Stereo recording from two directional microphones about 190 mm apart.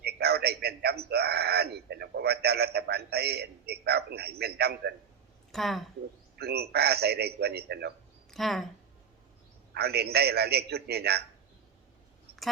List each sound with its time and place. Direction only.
0.0 s a sound: 55° right (ahead or behind)
5.5 s speech: centre (ahead or behind)
6.3 s a man's voice: 55° right (ahead or behind)
8.3 s speech: centre (ahead or behind)
9.7 s a man's voice: 55° right (ahead or behind)